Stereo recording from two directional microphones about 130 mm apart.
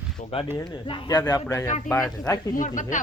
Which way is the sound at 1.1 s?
25° left (ahead or behind).